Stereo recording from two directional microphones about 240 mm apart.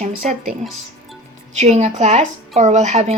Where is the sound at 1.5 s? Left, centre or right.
Right.